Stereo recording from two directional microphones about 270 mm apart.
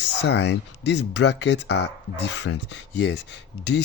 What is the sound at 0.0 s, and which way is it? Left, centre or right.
Speech, left.